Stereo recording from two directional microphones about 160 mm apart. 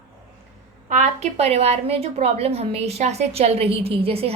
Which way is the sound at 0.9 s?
45° right (ahead or behind).